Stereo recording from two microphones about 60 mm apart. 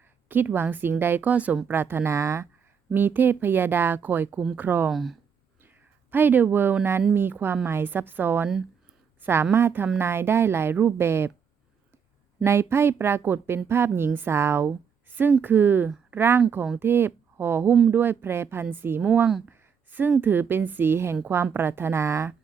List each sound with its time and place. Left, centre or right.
0.3 s speech: right
1.3 s speech: right
1.7 s a woman's voice: right
2.9 s speech: right
4.9 s speech: centre
6.1 s a woman's voice: right
12.4 s a woman's voice: right
14.7 s a sound: right
15.3 s speech: right
19.5 s a sound: right
20.2 s speech: right